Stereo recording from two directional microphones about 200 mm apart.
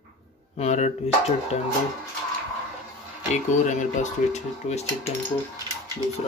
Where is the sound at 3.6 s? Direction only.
35° left (ahead or behind).